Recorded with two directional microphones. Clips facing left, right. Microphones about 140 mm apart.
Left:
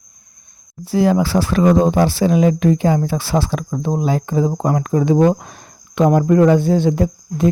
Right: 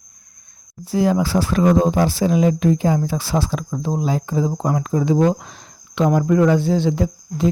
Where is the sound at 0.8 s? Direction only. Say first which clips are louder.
Left 3 dB; 70° left (ahead or behind).